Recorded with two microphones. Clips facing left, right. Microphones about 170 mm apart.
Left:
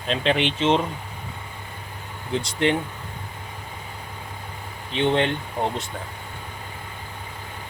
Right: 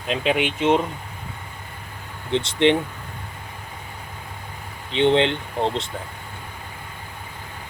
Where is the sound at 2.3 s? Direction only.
25° right (ahead or behind).